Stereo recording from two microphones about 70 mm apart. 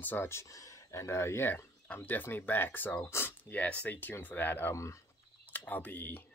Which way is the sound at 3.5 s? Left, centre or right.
Left.